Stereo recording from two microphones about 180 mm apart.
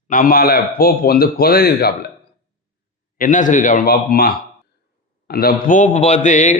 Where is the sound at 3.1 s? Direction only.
45° left (ahead or behind).